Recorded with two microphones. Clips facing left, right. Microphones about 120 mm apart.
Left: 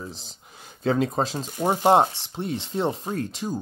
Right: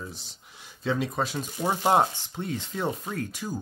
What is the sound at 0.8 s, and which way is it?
Speech, 40° left (ahead or behind).